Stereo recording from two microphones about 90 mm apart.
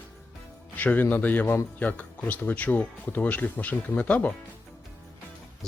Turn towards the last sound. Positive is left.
turn(degrees=15)  # may be behind; listen again after turning